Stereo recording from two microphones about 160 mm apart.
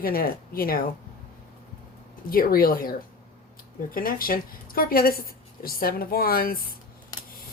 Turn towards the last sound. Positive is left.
turn(degrees=65)  # may be behind; listen again after turning